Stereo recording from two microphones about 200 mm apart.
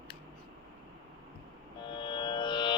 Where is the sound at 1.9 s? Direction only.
25° left (ahead or behind).